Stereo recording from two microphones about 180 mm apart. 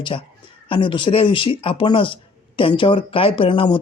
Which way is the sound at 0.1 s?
30° left (ahead or behind).